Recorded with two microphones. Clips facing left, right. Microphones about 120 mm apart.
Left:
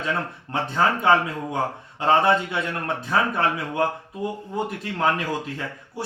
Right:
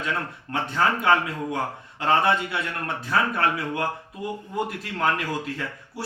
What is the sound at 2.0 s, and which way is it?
Speech, 20° left (ahead or behind).